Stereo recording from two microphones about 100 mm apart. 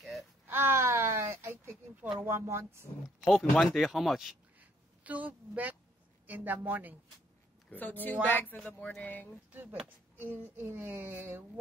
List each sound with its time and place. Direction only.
0.5 s a sound: 20° right (ahead or behind)
2.1 s a woman's voice: 30° right (ahead or behind)
3.3 s speech: centre (ahead or behind)
4.6 s a sound: 15° right (ahead or behind)
6.2 s speech: 15° right (ahead or behind)
7.7 s speech: 20° left (ahead or behind)
9.5 s a woman's voice: 20° right (ahead or behind)